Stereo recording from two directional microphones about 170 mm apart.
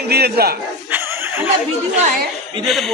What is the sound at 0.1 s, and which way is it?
Speech, 70° right (ahead or behind).